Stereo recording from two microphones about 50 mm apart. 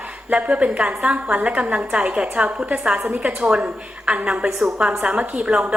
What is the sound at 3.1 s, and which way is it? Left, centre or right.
A woman's voice, right.